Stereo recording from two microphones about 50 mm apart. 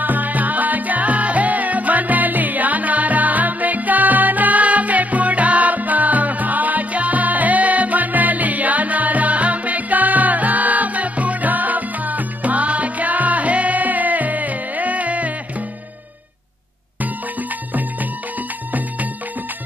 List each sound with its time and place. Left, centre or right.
0.0 s music: right
17.0 s music: right